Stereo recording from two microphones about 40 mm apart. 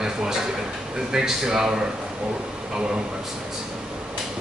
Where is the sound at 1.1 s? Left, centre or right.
Centre.